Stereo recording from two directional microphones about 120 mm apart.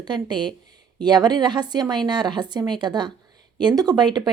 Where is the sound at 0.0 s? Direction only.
40° right (ahead or behind).